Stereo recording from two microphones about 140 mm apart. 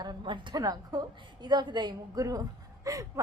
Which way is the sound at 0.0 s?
30° right (ahead or behind).